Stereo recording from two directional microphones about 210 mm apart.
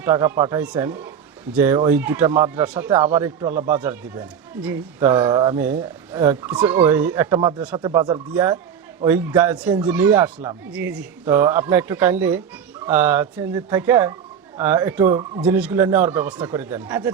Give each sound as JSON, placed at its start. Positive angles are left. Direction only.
{"t": 0.0, "sound": "speech", "side_deg": -10}
{"t": 5.2, "sound": "speech", "side_deg": -20}
{"t": 8.3, "sound": "speech", "side_deg": -10}